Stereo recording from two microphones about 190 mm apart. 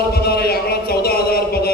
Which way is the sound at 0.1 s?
55° left (ahead or behind).